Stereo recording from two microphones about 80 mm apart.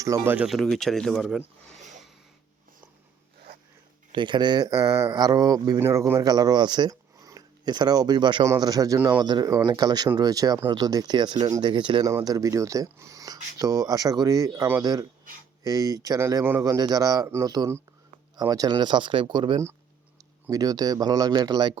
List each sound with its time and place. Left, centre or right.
0.1 s speech: right
0.4 s speech: centre
4.1 s speech: right
4.7 s speech: right
5.8 s speech: right
8.4 s speech: right
9.0 s speech: right
11.6 s speech: right
12.0 s speech: right
16.4 s a man's voice: right
16.6 s speech: right
18.8 s speech: right
20.5 s speech: right